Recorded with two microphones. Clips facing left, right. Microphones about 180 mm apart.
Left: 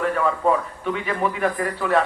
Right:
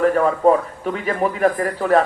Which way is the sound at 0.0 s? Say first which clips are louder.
Right 6 dB; 40° right (ahead or behind).